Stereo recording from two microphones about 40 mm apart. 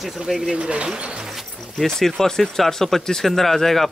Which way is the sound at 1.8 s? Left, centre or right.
Centre.